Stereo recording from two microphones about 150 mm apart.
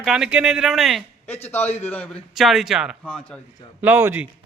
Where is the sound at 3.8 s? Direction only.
15° right (ahead or behind).